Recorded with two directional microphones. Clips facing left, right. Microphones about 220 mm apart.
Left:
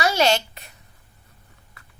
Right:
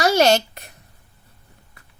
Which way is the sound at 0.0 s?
45° right (ahead or behind).